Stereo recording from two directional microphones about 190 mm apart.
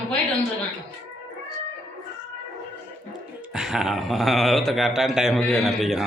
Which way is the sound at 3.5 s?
5° right (ahead or behind).